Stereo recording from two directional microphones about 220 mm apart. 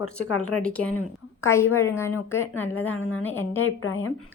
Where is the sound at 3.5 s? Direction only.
70° left (ahead or behind).